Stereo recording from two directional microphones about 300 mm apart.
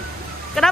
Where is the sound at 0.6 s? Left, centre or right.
Centre.